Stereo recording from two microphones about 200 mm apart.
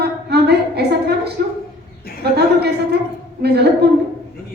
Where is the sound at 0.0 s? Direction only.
55° right (ahead or behind).